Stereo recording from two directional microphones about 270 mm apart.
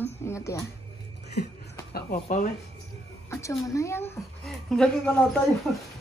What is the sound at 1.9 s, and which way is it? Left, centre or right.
Speech, left.